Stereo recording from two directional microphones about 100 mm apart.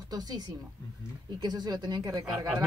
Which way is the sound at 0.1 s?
40° right (ahead or behind).